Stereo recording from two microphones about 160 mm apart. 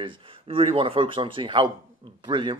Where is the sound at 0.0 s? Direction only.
30° right (ahead or behind).